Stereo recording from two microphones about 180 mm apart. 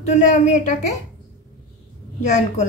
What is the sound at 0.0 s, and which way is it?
Speech, 40° left (ahead or behind).